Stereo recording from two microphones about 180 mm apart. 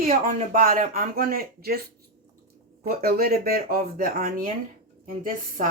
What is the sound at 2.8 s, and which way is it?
Speech, 60° right (ahead or behind).